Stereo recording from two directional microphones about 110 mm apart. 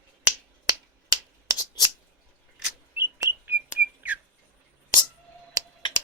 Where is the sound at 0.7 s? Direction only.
35° right (ahead or behind).